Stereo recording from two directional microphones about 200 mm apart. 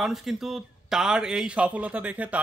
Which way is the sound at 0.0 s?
Centre (ahead or behind).